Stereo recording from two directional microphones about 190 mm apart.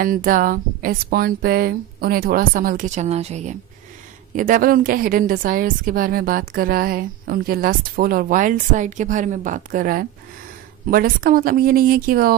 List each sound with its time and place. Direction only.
0.0 s a woman's voice: 45° right (ahead or behind)